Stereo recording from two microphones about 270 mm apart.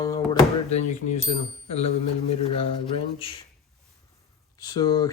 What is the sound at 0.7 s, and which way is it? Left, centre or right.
Speech, left.